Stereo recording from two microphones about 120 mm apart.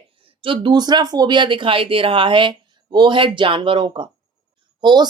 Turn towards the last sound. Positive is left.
turn(degrees=-35)  # may be behind; listen again after turning